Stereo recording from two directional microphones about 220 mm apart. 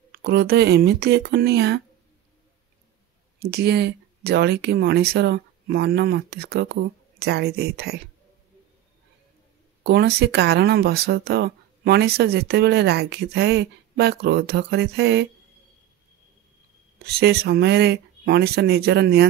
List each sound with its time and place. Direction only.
0.1 s speech: 45° right (ahead or behind)
3.3 s speech: 45° right (ahead or behind)
9.8 s speech: 45° right (ahead or behind)
17.0 s speech: 45° right (ahead or behind)